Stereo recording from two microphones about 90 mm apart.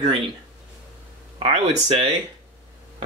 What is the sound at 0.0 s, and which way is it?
Speech, 70° right (ahead or behind).